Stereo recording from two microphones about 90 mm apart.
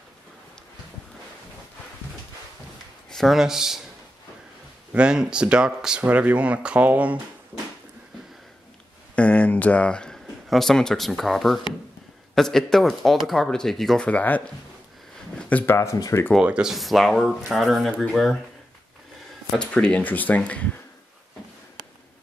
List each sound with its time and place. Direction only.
3.1 s speech: centre (ahead or behind)
4.9 s speech: 10° right (ahead or behind)
9.1 s speech: 15° left (ahead or behind)
14.0 s speech: 15° left (ahead or behind)
15.6 s speech: 30° left (ahead or behind)
16.3 s speech: 10° right (ahead or behind)
16.7 s speech: centre (ahead or behind)
19.6 s speech: 10° left (ahead or behind)